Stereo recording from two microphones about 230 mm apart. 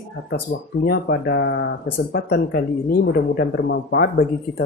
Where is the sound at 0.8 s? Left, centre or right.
Left.